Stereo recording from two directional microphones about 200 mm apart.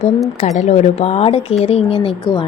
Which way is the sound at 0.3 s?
35° left (ahead or behind).